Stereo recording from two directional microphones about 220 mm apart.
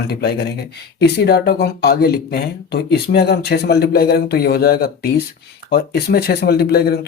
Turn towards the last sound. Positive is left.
turn(degrees=45)  # may be behind; listen again after turning